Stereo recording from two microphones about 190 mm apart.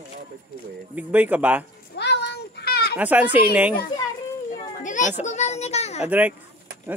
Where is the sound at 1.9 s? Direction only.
60° left (ahead or behind).